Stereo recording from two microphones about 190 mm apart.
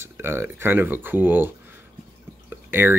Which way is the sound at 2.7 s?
10° right (ahead or behind).